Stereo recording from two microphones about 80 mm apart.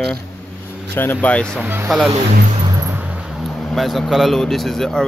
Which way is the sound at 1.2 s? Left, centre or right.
Centre.